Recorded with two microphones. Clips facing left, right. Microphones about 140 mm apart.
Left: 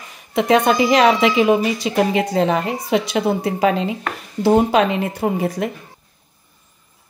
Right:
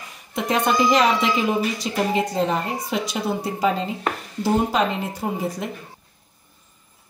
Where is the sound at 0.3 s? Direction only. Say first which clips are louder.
Left 6 dB; 90° left; by 5.7 s 70° left (ahead or behind).